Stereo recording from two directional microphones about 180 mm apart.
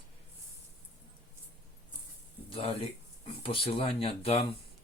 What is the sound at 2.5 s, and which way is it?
Speech, 30° left (ahead or behind).